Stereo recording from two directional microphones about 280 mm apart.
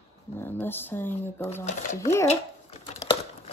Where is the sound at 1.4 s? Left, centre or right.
Left.